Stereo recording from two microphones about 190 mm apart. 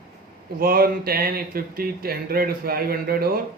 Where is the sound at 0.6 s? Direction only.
50° right (ahead or behind).